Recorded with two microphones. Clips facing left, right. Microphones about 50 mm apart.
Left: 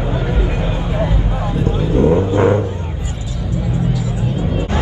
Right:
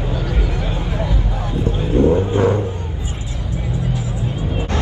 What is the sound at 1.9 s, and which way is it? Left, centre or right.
Vehicle, left.